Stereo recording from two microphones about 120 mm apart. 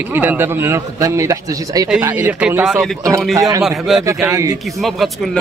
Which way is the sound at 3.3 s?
25° right (ahead or behind).